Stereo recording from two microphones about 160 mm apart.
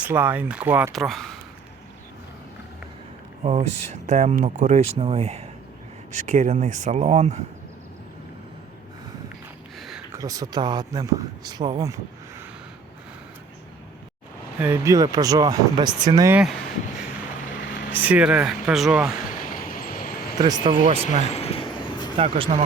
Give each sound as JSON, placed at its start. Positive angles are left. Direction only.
{"t": 0.0, "sound": "speech", "side_deg": -15}
{"t": 0.9, "sound": "speech", "side_deg": 0}
{"t": 4.0, "sound": "speech", "side_deg": -45}
{"t": 6.1, "sound": "speech", "side_deg": -50}
{"t": 9.7, "sound": "a sound", "side_deg": 0}
{"t": 10.1, "sound": "speech", "side_deg": -20}
{"t": 14.6, "sound": "speech", "side_deg": -15}
{"t": 16.3, "sound": "speech", "side_deg": -5}
{"t": 17.9, "sound": "speech", "side_deg": -10}
{"t": 19.5, "sound": "vehicle", "side_deg": 60}
{"t": 20.4, "sound": "speech", "side_deg": -25}
{"t": 20.8, "sound": "speech", "side_deg": -40}
{"t": 21.2, "sound": "vehicle", "side_deg": 40}
{"t": 22.2, "sound": "speech", "side_deg": -40}